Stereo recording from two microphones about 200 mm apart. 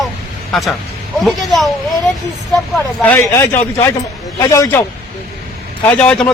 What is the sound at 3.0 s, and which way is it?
A man's voice, 10° left (ahead or behind).